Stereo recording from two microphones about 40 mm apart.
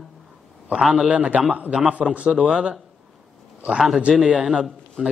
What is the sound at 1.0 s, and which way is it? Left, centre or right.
A man's voice, right.